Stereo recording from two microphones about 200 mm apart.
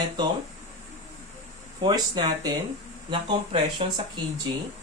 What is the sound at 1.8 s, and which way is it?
Speech, 20° right (ahead or behind).